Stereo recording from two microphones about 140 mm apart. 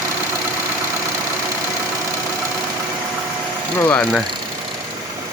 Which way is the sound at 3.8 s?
15° left (ahead or behind).